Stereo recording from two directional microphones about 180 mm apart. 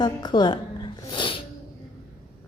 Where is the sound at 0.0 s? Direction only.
25° left (ahead or behind).